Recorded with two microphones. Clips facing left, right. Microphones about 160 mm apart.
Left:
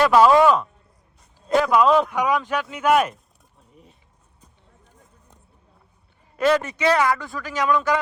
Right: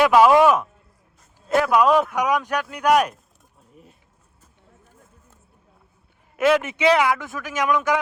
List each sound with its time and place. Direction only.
0.0 s speech: 10° right (ahead or behind)
6.3 s a man's voice: 5° right (ahead or behind)